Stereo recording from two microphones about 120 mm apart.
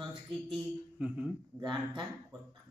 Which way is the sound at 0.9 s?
10° right (ahead or behind).